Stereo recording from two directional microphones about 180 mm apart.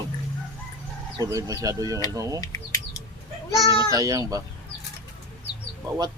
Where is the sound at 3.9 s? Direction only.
20° right (ahead or behind).